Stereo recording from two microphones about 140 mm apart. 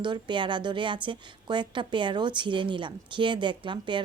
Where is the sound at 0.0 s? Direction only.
35° right (ahead or behind).